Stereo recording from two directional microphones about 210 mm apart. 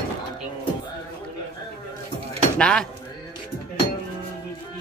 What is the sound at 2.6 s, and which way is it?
Speech, 5° left (ahead or behind).